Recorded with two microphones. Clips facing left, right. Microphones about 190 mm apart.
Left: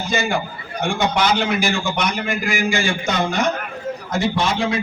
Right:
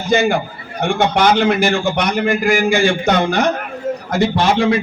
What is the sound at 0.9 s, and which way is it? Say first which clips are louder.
A man's voice: right 5 dB; 55° right (ahead or behind).